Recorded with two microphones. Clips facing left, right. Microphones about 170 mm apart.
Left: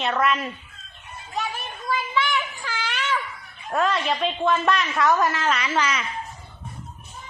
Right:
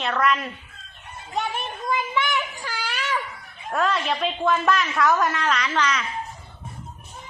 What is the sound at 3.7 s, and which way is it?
A woman's voice, centre (ahead or behind).